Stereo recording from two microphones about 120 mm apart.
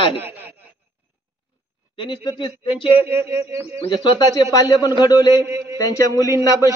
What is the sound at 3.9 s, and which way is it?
A man's voice, 35° left (ahead or behind).